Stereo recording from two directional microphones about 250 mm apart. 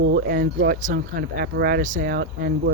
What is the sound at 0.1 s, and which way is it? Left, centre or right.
Speech, right.